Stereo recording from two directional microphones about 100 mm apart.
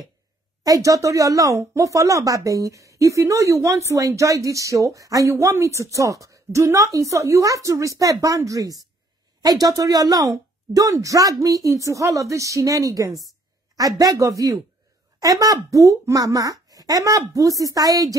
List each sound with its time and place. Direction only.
0.7 s speech: 35° right (ahead or behind)
13.1 s a woman's voice: centre (ahead or behind)
13.7 s speech: 35° right (ahead or behind)